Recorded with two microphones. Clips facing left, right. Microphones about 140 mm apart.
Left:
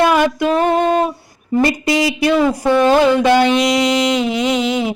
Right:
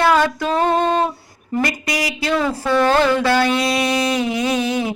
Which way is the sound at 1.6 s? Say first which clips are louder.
Left 7 dB; 25° left (ahead or behind).